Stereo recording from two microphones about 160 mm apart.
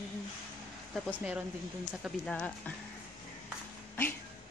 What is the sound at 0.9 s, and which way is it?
Speech, 5° right (ahead or behind).